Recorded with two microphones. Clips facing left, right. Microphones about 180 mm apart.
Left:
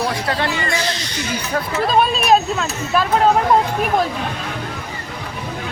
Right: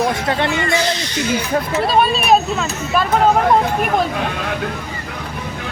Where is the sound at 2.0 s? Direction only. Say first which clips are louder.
Even; 5° right (ahead or behind).